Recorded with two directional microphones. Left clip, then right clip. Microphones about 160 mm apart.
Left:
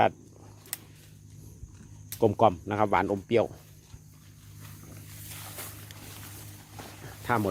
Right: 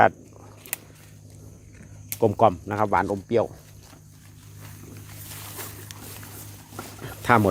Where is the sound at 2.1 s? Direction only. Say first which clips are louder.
Right 3 dB; 10° left (ahead or behind).